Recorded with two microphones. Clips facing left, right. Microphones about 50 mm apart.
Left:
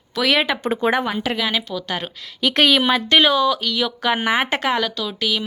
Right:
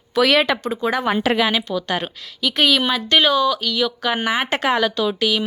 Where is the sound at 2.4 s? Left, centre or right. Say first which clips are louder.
Left 1 dB; left.